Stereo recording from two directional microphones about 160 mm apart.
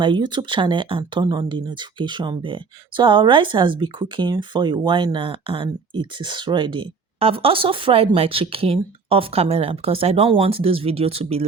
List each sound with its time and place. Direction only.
0.0 s speech: 30° right (ahead or behind)